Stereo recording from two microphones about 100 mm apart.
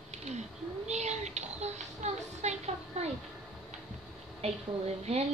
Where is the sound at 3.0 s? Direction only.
90° right.